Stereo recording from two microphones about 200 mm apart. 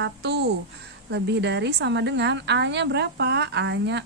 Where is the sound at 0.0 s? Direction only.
55° right (ahead or behind).